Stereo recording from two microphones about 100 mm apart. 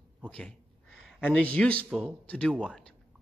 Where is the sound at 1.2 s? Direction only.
10° left (ahead or behind).